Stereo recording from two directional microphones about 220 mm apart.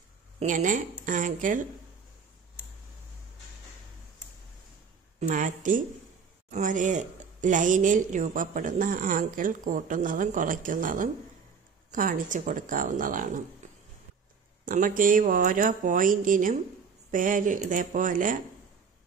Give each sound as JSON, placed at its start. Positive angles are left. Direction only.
{"t": 0.4, "sound": "a woman's voice", "side_deg": -35}
{"t": 5.3, "sound": "a woman's voice", "side_deg": -35}
{"t": 14.6, "sound": "a woman's voice", "side_deg": -40}